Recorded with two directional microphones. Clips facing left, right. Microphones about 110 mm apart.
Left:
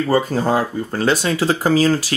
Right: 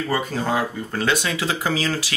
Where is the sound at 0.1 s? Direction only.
35° left (ahead or behind).